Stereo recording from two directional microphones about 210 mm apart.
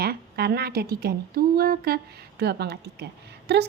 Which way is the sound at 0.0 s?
50° right (ahead or behind).